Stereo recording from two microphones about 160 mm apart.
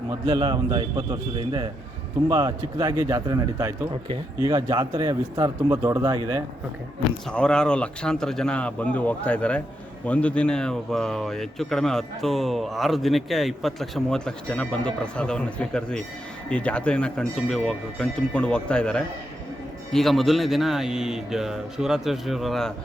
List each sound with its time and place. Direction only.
0.1 s a man's voice: 25° right (ahead or behind)
7.3 s speech: 5° left (ahead or behind)